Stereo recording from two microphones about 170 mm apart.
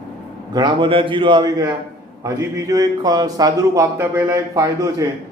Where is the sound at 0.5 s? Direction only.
25° right (ahead or behind).